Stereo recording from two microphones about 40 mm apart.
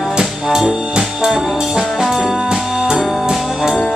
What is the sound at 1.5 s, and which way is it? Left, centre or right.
Brass instrument, centre.